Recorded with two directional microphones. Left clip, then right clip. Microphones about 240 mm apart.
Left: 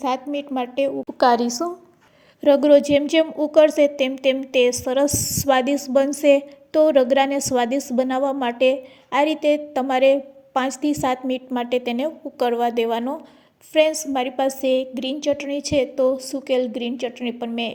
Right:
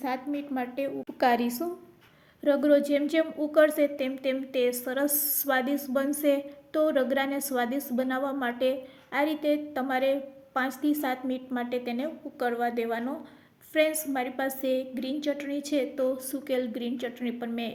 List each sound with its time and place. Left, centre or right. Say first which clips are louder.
0.5 s a woman's voice: left 11 dB; left
1.3 s a woman's voice: left 8 dB; centre
2.4 s a woman's voice: left 9 dB; left